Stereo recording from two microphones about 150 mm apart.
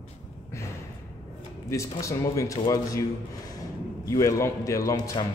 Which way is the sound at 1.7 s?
20° left (ahead or behind).